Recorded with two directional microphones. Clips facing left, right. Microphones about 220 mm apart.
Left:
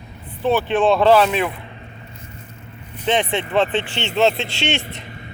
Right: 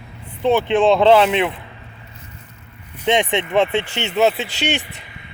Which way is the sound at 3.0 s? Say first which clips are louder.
Right 2 dB; 15° right (ahead or behind).